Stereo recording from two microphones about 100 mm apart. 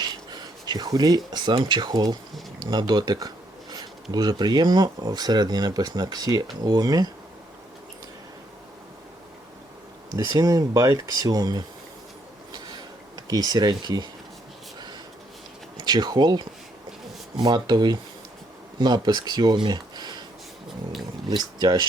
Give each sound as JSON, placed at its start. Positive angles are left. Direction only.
{"t": 0.0, "sound": "speech", "side_deg": -45}
{"t": 10.3, "sound": "speech", "side_deg": -35}
{"t": 12.5, "sound": "a sound", "side_deg": -40}
{"t": 15.8, "sound": "speech", "side_deg": -45}
{"t": 19.5, "sound": "a sound", "side_deg": -50}
{"t": 21.2, "sound": "speech", "side_deg": -45}